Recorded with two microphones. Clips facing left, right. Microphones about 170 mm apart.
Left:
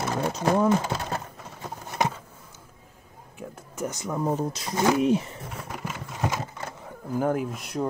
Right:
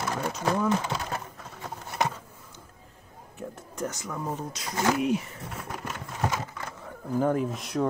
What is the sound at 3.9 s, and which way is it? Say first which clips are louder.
Speech: left 6 dB; 20° left (ahead or behind).